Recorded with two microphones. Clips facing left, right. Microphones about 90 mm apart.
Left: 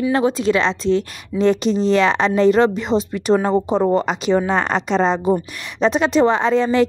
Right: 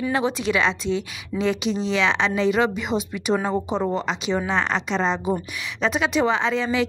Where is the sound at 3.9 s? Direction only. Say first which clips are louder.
Left 7 dB; 50° left (ahead or behind).